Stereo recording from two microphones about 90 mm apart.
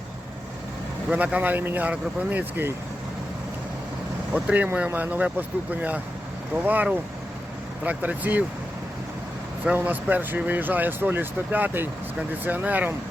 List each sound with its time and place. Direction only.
1.1 s speech: 20° right (ahead or behind)
4.4 s speech: 15° right (ahead or behind)
9.7 s speech: 20° right (ahead or behind)